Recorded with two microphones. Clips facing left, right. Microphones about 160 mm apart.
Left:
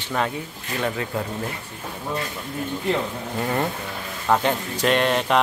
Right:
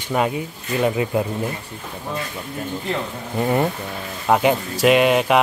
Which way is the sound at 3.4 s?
15° right (ahead or behind).